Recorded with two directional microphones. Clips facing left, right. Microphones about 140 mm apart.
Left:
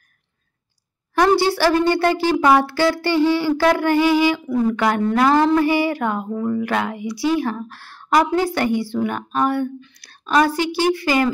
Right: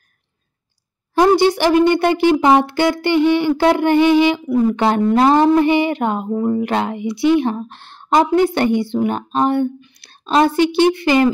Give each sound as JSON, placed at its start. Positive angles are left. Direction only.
{"t": 1.1, "sound": "speech", "side_deg": -20}